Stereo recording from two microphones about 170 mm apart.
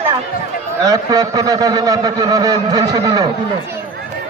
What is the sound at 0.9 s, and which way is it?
A man's voice, 25° right (ahead or behind).